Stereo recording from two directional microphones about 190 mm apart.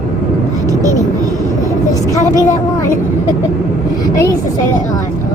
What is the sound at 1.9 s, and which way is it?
Vehicle, 20° left (ahead or behind).